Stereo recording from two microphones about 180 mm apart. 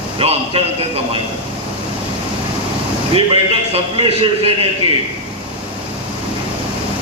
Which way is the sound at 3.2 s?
30° right (ahead or behind).